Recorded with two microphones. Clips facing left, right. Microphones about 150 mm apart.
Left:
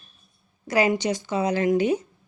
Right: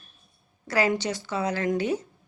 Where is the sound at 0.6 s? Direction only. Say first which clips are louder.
Left 3 dB; 15° left (ahead or behind).